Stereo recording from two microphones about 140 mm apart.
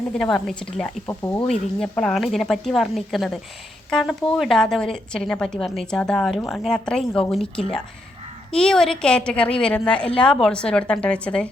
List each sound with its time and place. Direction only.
0.1 s a woman's voice: 5° left (ahead or behind)
1.0 s a woman's voice: 15° left (ahead or behind)
1.5 s a woman's voice: 5° left (ahead or behind)